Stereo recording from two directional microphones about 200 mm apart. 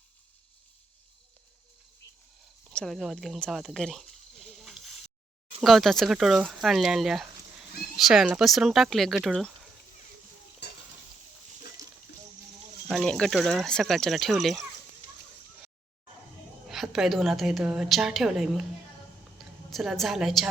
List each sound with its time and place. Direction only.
2.7 s a sound: centre (ahead or behind)
5.6 s speech: centre (ahead or behind)
10.6 s stir: 60° left (ahead or behind)
11.8 s a sound: 15° right (ahead or behind)
12.9 s speech: 5° left (ahead or behind)
16.6 s speech: centre (ahead or behind)
19.7 s speech: centre (ahead or behind)